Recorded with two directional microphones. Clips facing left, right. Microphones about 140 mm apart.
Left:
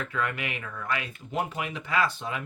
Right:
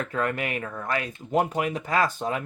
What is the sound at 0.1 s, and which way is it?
Speech, 40° right (ahead or behind).